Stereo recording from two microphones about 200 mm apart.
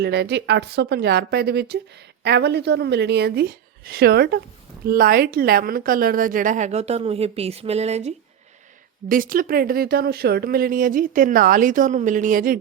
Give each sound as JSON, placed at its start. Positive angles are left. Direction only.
{"t": 0.0, "sound": "a woman's voice", "side_deg": -55}
{"t": 9.0, "sound": "speech", "side_deg": -45}